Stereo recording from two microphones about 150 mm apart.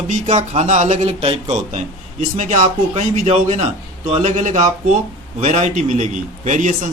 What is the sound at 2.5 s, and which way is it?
Speech, 40° right (ahead or behind).